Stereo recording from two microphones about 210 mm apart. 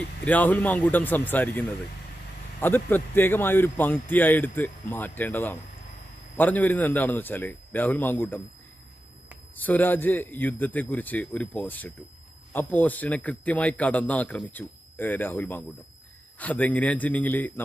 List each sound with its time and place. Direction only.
0.3 s a man's voice: 5° left (ahead or behind)
9.6 s a man's voice: 10° left (ahead or behind)